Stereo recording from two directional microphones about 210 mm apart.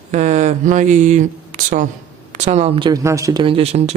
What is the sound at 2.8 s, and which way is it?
Speech, 15° right (ahead or behind).